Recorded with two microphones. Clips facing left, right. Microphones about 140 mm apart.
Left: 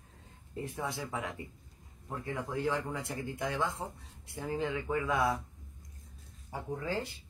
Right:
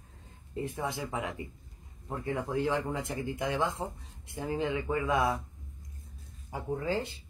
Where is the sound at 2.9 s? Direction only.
20° right (ahead or behind).